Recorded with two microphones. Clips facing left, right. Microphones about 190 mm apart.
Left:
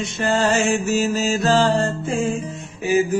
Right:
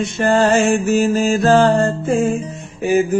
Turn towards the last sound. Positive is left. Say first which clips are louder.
# right 3 dB
turn(degrees=-55)  # may be behind; listen again after turning